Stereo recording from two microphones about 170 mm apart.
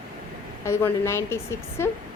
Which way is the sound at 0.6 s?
15° left (ahead or behind).